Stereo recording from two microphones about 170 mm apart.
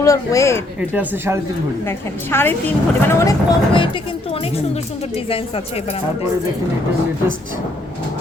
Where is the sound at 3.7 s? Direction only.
30° left (ahead or behind).